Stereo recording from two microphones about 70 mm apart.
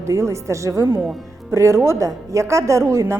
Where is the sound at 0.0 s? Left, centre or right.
Right.